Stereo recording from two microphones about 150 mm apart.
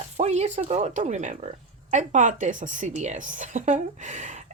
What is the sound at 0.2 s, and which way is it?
Speech, 45° right (ahead or behind).